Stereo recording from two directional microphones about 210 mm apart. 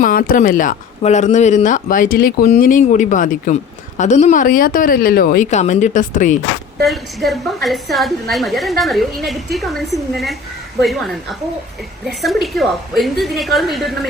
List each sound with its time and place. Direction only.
0.0 s a woman's voice: 40° left (ahead or behind)
6.8 s a woman's voice: centre (ahead or behind)